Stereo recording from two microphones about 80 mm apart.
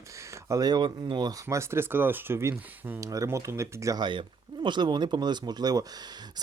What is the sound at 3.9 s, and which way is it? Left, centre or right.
Speech, right.